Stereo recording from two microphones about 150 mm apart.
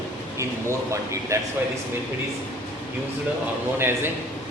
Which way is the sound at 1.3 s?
20° right (ahead or behind).